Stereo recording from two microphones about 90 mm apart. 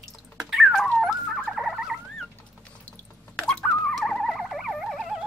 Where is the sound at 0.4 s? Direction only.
Centre (ahead or behind).